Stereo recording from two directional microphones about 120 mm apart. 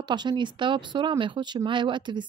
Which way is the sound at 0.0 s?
40° right (ahead or behind).